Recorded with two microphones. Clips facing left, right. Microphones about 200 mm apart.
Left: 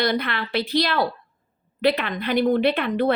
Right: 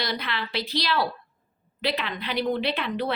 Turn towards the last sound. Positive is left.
turn(degrees=50)  # may be behind; listen again after turning